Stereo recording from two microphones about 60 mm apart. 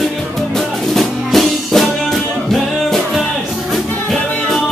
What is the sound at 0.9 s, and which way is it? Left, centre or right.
Music, centre.